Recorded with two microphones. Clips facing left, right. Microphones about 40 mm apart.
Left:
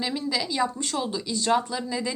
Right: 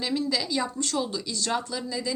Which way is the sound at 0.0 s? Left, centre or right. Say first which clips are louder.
Even; centre.